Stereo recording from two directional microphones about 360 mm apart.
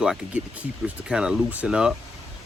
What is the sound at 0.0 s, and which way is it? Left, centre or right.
Speech, centre.